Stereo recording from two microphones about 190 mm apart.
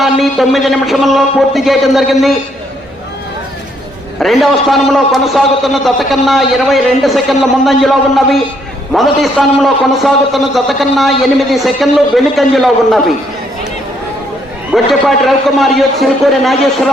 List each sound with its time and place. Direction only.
0.0 s a man's voice: centre (ahead or behind)
4.2 s a man's voice: centre (ahead or behind)
14.7 s a man's voice: centre (ahead or behind)